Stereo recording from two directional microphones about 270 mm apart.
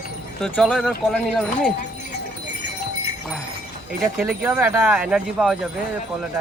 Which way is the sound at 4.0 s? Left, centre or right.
Centre.